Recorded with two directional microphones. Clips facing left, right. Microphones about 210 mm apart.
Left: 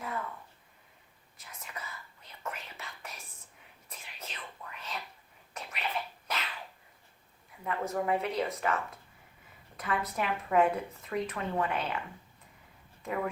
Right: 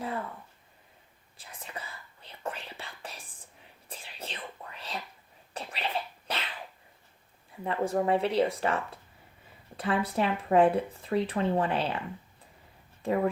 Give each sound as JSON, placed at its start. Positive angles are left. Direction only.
{"t": 1.4, "sound": "whispering", "side_deg": -30}
{"t": 5.5, "sound": "a sound", "side_deg": -30}
{"t": 7.6, "sound": "speech", "side_deg": -30}
{"t": 13.0, "sound": "speech", "side_deg": -30}